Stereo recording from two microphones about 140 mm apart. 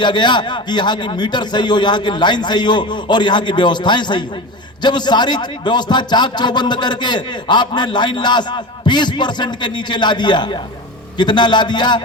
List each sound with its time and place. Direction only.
0.0 s a man's voice: 35° left (ahead or behind)